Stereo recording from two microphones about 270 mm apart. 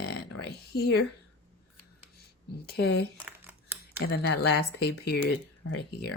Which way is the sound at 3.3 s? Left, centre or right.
Centre.